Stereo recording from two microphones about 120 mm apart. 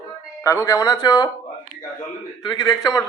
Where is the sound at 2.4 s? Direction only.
35° left (ahead or behind).